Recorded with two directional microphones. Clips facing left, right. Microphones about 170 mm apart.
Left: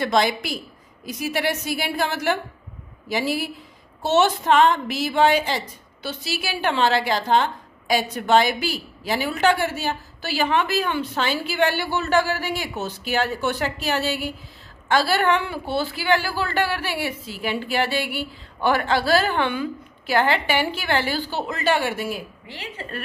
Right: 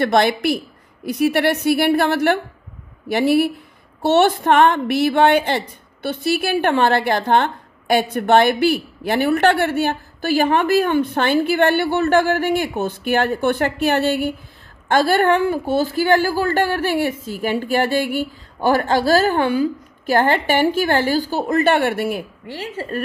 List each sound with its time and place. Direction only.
0.0 s a woman's voice: 60° right (ahead or behind)
22.6 s a woman's voice: 40° right (ahead or behind)